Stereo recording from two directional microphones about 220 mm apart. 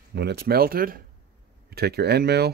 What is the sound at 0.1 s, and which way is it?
Speech, 50° right (ahead or behind).